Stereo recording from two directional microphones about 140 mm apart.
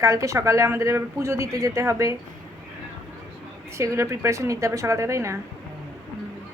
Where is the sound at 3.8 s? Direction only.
20° right (ahead or behind).